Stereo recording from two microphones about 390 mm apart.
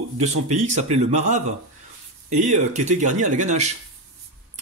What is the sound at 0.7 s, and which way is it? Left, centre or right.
Speech, centre.